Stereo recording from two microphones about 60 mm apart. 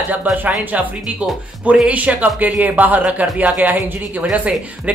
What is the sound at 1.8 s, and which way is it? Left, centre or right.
A woman's voice, right.